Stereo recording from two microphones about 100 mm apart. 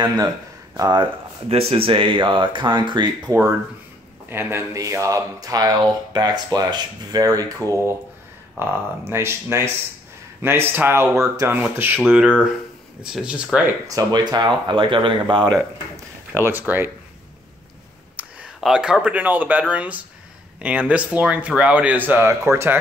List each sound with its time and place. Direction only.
0.0 s speech: 40° right (ahead or behind)
1.5 s speech: 80° right; by 3.3 s 45° right (ahead or behind)
4.3 s speech: 25° right (ahead or behind)
12.0 s speech: 10° right (ahead or behind)
13.8 s speech: 40° right (ahead or behind)
16.3 s speech: 20° right (ahead or behind)
18.2 s a sound: 15° right (ahead or behind)
18.6 s speech: 5° right (ahead or behind)
22.3 s speech: 30° right (ahead or behind)